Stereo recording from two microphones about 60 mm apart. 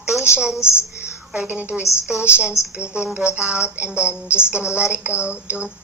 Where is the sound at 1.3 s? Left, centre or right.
Right.